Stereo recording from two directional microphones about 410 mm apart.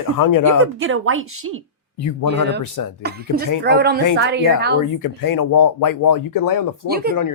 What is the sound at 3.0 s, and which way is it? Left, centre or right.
Speech, right.